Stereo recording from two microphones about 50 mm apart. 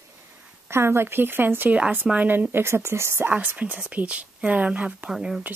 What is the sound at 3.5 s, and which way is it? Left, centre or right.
Speech, right.